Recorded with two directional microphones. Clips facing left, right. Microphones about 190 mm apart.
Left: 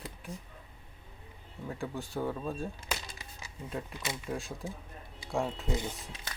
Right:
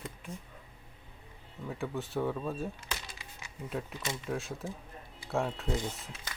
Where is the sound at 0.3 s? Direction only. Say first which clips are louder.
Left 2 dB; 35° left (ahead or behind).